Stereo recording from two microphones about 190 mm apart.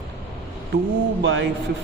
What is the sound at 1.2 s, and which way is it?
Speech, 65° right (ahead or behind).